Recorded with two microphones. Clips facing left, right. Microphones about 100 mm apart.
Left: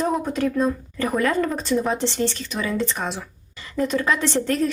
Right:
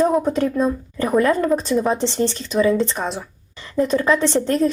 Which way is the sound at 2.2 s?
25° right (ahead or behind).